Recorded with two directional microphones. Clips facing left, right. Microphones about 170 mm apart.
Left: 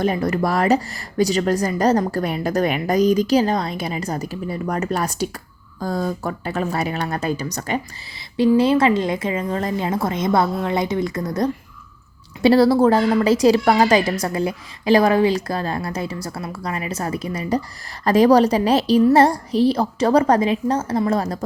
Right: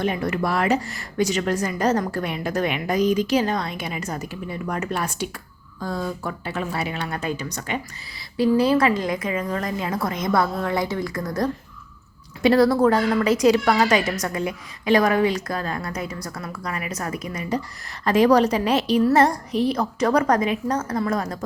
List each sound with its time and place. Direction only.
0.0 s speech: 40° left (ahead or behind)
8.4 s a woman's voice: 25° left (ahead or behind)
12.4 s speech: 30° left (ahead or behind)